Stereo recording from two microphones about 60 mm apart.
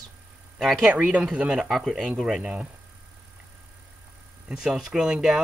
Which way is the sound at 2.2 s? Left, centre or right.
Centre.